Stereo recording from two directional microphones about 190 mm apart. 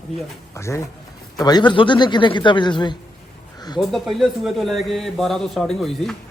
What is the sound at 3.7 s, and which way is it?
A man's voice, centre (ahead or behind).